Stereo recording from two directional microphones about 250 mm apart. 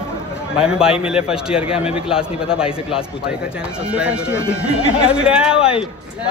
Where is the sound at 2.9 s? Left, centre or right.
Centre.